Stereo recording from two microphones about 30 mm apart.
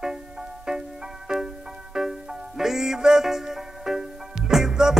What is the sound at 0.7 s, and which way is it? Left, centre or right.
Music, right.